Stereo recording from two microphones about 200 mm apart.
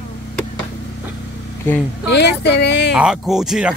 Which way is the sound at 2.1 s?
55° left (ahead or behind).